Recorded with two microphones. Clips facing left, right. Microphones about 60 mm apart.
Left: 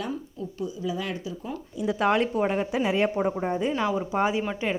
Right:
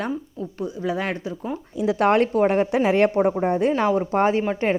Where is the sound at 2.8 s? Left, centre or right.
Right.